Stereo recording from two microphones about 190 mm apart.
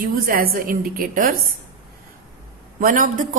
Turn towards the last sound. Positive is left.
turn(degrees=-45)  # may be behind; listen again after turning